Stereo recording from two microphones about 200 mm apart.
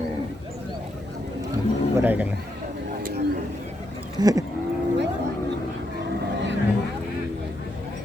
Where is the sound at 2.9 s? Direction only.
45° right (ahead or behind).